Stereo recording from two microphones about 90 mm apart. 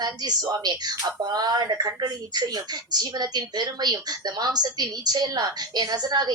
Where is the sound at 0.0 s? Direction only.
50° right (ahead or behind).